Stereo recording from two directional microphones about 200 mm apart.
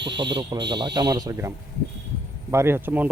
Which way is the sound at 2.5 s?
10° right (ahead or behind).